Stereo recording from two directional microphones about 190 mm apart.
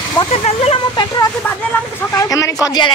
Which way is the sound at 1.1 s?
20° left (ahead or behind).